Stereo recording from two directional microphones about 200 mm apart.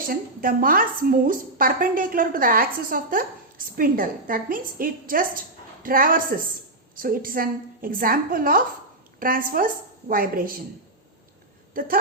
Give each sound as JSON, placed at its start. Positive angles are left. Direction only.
{"t": 0.1, "sound": "a woman's voice", "side_deg": -45}
{"t": 11.7, "sound": "speech", "side_deg": -45}